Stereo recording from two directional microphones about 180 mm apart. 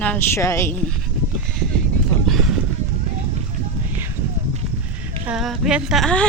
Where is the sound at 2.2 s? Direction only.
Centre (ahead or behind).